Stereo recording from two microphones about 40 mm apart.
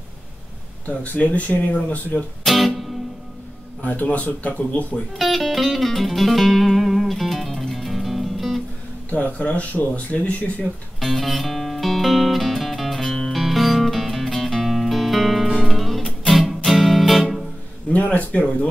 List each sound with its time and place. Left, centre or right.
1.0 s speech: left
2.4 s music: centre
3.8 s speech: left
5.1 s music: centre
9.1 s speech: left
11.0 s music: centre
17.9 s speech: left